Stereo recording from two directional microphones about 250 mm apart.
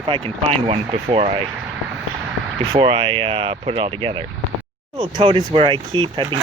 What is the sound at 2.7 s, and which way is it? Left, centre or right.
Speech, right.